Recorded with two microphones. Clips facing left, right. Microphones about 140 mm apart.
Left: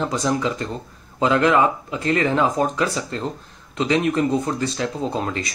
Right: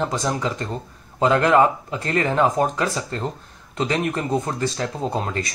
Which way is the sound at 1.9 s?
35° right (ahead or behind).